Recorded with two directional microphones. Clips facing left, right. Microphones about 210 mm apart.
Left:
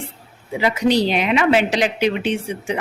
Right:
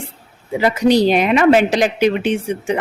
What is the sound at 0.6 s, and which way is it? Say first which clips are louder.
Speech: right 4 dB; 45° right (ahead or behind).